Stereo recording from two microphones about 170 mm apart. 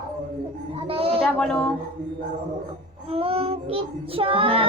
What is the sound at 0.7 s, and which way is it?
Speech, 35° right (ahead or behind).